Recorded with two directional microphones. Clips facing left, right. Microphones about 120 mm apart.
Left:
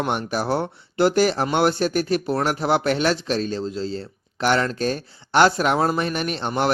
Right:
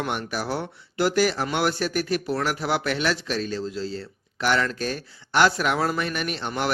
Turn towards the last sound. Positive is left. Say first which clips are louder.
# left 5 dB
turn(degrees=30)  # may be behind; listen again after turning